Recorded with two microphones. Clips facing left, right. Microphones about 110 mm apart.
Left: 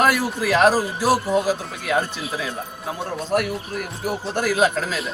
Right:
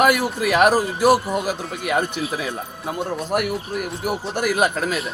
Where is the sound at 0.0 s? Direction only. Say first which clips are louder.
Right 2 dB; 15° right (ahead or behind).